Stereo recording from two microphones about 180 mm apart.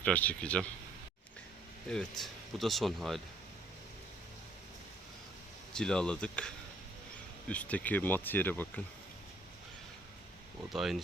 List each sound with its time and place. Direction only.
0.0 s speech: 10° left (ahead or behind)
1.9 s speech: 5° left (ahead or behind)
5.7 s speech: 5° left (ahead or behind)
10.7 s speech: centre (ahead or behind)